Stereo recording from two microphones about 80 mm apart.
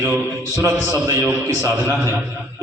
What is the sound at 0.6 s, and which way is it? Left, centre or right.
Speech, right.